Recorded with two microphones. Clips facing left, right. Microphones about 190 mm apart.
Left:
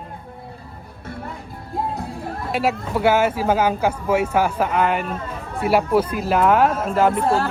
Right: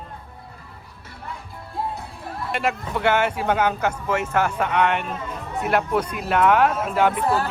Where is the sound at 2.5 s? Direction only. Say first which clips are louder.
Left 4 dB; 5° left (ahead or behind).